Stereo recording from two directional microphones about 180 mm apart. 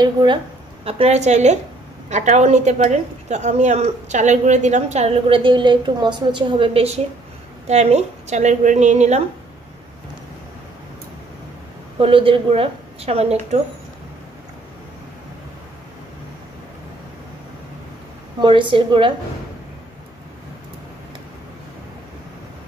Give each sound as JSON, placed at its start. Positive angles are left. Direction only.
{"t": 0.0, "sound": "a woman's voice", "side_deg": -25}
{"t": 12.0, "sound": "a woman's voice", "side_deg": -30}
{"t": 18.4, "sound": "a woman's voice", "side_deg": -25}